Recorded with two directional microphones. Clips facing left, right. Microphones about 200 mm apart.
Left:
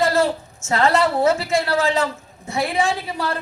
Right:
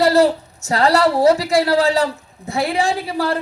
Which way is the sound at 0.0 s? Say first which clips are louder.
Right 5 dB; 40° right (ahead or behind).